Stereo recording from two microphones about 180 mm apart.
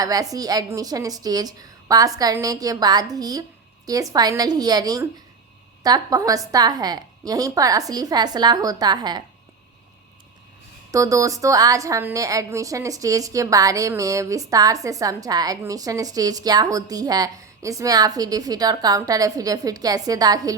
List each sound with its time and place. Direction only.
0.0 s a woman's voice: 20° right (ahead or behind)
10.9 s a woman's voice: 20° right (ahead or behind)